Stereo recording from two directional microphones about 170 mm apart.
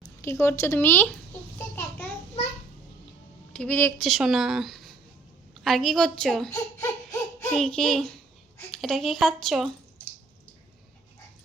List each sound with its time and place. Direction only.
0.2 s speech: 15° left (ahead or behind)
1.5 s a sound: 15° left (ahead or behind)
3.5 s speech: 10° left (ahead or behind)
4.0 s a woman's voice: centre (ahead or behind)
6.5 s baby cry: 20° left (ahead or behind)
7.5 s a woman's voice: 5° left (ahead or behind)